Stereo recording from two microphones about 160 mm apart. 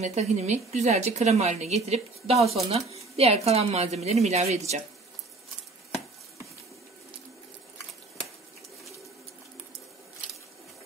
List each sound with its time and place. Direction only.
0.0 s a woman's voice: 45° right (ahead or behind)